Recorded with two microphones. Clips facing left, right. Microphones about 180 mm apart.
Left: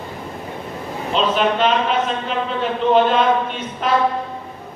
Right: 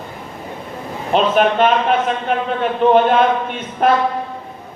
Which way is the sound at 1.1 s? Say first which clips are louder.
Right 4 dB; 55° right (ahead or behind).